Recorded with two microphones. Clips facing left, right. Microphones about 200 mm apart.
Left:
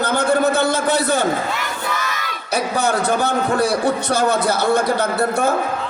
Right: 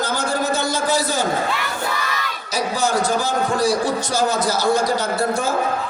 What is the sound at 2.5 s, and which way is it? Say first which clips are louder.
A man's voice: left 2 dB; 60° left (ahead or behind).